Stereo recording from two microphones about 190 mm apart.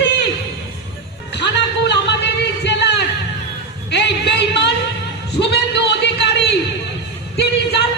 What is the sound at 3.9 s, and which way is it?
Music, 65° left (ahead or behind).